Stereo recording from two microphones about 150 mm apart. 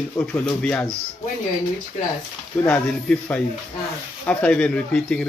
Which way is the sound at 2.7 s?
5° left (ahead or behind).